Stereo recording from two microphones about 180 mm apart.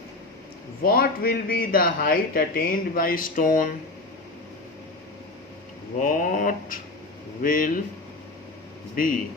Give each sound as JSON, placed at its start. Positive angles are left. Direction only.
{"t": 0.8, "sound": "speech", "side_deg": 55}
{"t": 6.0, "sound": "speech", "side_deg": 50}
{"t": 9.0, "sound": "speech", "side_deg": 50}